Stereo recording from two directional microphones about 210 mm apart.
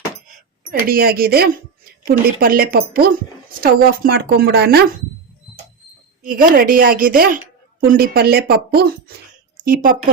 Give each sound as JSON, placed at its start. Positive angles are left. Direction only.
{"t": 0.7, "sound": "speech", "side_deg": -45}
{"t": 6.2, "sound": "a woman's voice", "side_deg": -40}